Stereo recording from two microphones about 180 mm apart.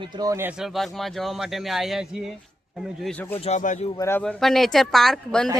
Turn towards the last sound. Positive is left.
turn(degrees=0)  # may be behind; listen again after turning